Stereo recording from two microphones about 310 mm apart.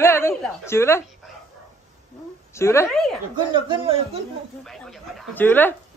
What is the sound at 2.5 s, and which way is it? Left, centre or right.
Speech, centre.